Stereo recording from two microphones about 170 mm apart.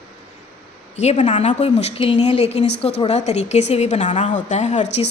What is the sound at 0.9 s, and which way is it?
A woman's voice, 40° left (ahead or behind).